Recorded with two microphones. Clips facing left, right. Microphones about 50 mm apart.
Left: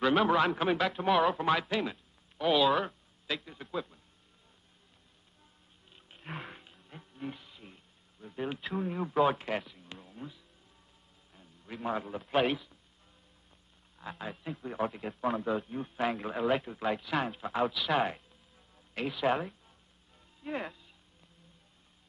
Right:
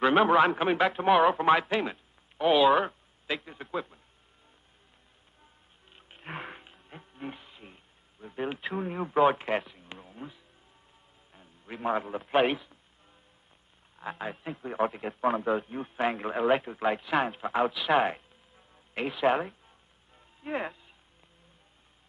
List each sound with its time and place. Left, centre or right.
0.0 s a man's voice: right
5.9 s wild animals: right
8.6 s a man's voice: right
13.9 s a man's voice: right
17.7 s a sound: right
19.1 s speech: right
20.2 s music: right